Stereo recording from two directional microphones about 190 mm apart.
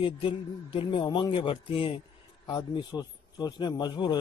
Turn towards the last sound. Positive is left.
turn(degrees=25)  # may be behind; listen again after turning